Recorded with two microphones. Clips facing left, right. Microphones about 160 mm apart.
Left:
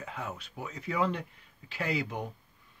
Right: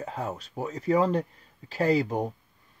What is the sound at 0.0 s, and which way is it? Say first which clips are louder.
Speech: right 6 dB; 40° right (ahead or behind).